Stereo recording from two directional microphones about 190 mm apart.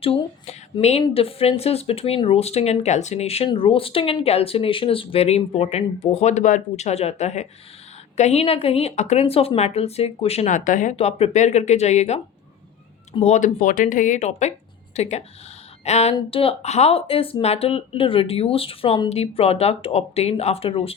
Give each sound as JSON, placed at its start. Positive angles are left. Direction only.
{"t": 0.0, "sound": "speech", "side_deg": 30}
{"t": 15.8, "sound": "a sound", "side_deg": 35}
{"t": 16.1, "sound": "speech", "side_deg": 30}